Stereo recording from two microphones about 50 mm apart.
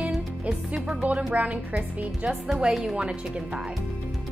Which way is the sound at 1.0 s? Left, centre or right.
Right.